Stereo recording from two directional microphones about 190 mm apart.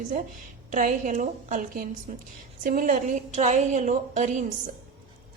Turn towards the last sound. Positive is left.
turn(degrees=-40)  # may be behind; listen again after turning